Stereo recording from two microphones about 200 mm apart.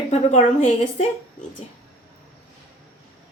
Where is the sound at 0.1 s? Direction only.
35° left (ahead or behind).